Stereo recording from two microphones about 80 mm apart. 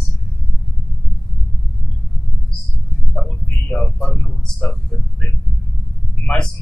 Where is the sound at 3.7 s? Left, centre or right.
Centre.